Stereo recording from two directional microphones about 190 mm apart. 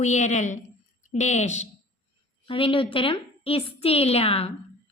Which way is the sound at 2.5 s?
25° left (ahead or behind).